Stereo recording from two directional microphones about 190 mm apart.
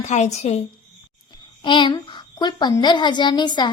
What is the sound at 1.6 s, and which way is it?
A woman's voice, 25° left (ahead or behind).